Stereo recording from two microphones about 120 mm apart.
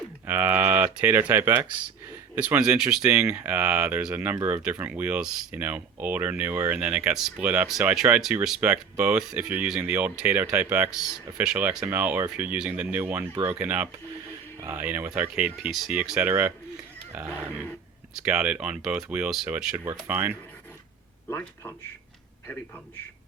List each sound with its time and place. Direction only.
0.3 s speech: 15° right (ahead or behind)
7.4 s speech: 15° right (ahead or behind)
17.5 s a man's voice: 15° left (ahead or behind)
18.3 s speech: 10° right (ahead or behind)
19.7 s speech: 20° right (ahead or behind)
21.2 s a man's voice: 20° left (ahead or behind)